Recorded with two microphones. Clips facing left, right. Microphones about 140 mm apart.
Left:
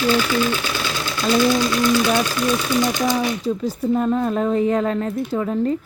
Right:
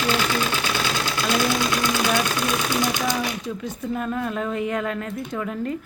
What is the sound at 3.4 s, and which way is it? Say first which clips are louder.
A woman's voice: left 8 dB; 35° left (ahead or behind).